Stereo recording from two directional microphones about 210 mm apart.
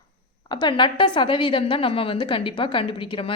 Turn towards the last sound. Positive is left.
turn(degrees=25)  # may be behind; listen again after turning